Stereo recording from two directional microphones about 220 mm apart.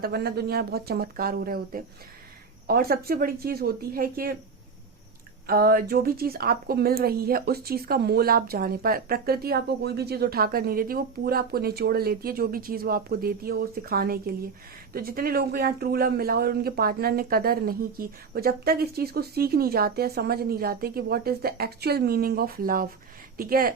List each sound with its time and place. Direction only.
0.0 s speech: 45° right (ahead or behind)
5.5 s speech: 45° right (ahead or behind)